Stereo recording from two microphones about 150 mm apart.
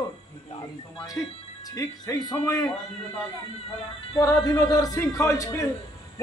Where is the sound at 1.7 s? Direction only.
25° left (ahead or behind).